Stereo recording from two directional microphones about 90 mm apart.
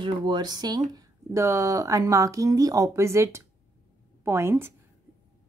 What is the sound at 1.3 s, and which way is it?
Speech, 35° right (ahead or behind).